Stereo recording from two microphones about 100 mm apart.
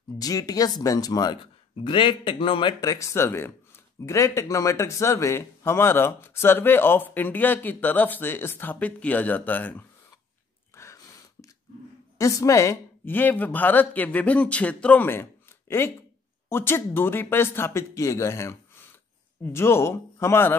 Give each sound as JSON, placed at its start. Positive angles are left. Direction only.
{"t": 0.2, "sound": "speech", "side_deg": 40}
{"t": 1.4, "sound": "speech", "side_deg": 55}
{"t": 2.8, "sound": "speech", "side_deg": 35}
{"t": 10.8, "sound": "a sound", "side_deg": 30}
{"t": 12.2, "sound": "speech", "side_deg": 35}
{"t": 16.4, "sound": "speech", "side_deg": 25}